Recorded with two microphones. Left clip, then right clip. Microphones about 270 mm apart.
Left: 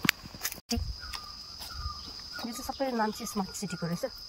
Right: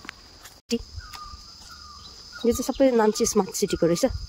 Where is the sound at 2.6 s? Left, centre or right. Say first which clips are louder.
Right 10 dB; right.